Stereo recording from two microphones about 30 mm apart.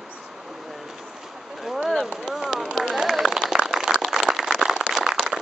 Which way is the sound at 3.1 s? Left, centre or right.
Centre.